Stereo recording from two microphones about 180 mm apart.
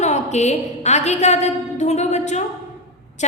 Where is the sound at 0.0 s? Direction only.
40° left (ahead or behind).